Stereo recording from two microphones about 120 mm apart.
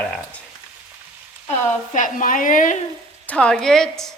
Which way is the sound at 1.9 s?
90° left.